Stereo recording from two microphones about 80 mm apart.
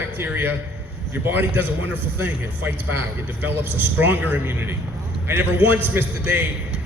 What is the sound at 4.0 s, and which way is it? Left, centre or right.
A man's voice, right.